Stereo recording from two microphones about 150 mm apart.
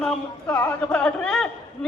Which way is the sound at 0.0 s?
5° left (ahead or behind).